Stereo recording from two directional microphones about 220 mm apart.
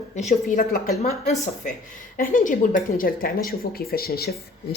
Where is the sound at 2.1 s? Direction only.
40° left (ahead or behind).